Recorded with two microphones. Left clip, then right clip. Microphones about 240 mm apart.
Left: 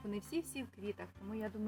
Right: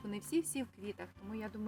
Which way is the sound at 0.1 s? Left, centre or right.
Right.